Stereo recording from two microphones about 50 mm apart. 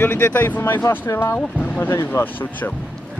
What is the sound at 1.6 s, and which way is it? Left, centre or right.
Speech, left.